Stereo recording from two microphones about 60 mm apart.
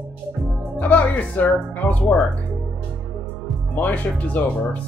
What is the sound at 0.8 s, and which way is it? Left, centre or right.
Speech, left.